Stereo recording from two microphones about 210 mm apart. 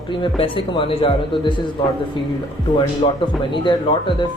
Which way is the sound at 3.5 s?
20° left (ahead or behind).